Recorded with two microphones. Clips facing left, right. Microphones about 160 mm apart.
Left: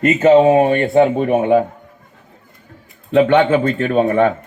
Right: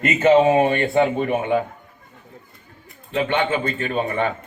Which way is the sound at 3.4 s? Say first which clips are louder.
Left 8 dB; 50° left (ahead or behind).